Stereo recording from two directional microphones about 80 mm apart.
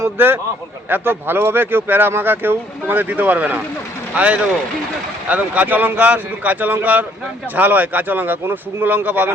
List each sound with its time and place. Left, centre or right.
0.2 s speech: right